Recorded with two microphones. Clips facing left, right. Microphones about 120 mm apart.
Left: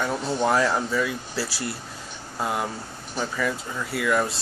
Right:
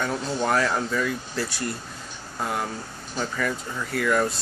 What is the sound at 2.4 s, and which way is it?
Speech, 15° left (ahead or behind).